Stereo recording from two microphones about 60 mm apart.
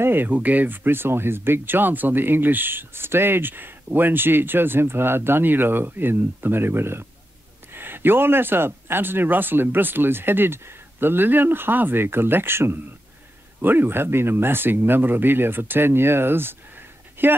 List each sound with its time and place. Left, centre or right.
0.0 s speech: right